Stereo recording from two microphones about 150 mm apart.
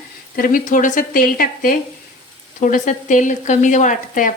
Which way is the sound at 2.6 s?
60° left (ahead or behind).